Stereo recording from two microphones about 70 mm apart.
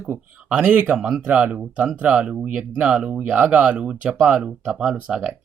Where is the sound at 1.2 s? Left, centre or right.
Centre.